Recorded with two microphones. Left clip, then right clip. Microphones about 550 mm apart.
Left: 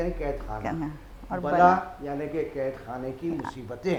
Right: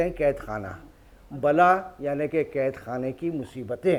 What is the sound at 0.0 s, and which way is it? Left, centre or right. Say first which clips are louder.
Speech: right 6 dB; right.